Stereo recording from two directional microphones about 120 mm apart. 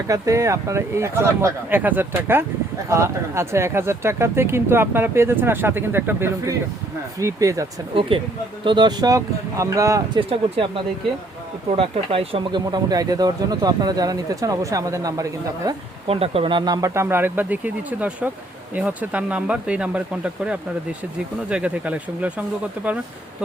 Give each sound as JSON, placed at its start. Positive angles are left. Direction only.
{"t": 0.1, "sound": "speech", "side_deg": -25}
{"t": 8.1, "sound": "speech", "side_deg": -45}
{"t": 10.2, "sound": "speech", "side_deg": -50}
{"t": 16.0, "sound": "speech", "side_deg": -55}
{"t": 16.9, "sound": "speech", "side_deg": -20}